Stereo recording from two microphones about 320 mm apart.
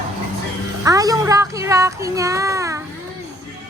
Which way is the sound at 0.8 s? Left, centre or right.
Centre.